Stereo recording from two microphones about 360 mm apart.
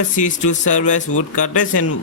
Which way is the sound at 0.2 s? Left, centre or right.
Left.